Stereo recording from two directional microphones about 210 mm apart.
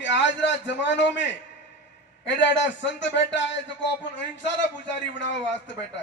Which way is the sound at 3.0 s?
60° left (ahead or behind).